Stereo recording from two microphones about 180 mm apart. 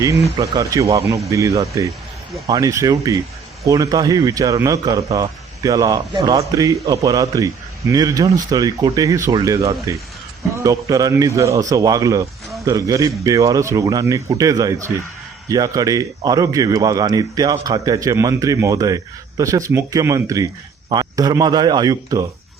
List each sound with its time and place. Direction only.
0.3 s a man's voice: 20° right (ahead or behind)